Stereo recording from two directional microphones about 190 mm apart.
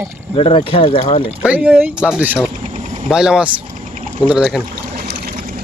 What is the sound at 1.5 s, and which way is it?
Speech, 5° right (ahead or behind).